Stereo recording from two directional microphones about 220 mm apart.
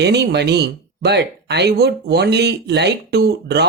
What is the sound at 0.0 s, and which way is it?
Speech, 50° right (ahead or behind).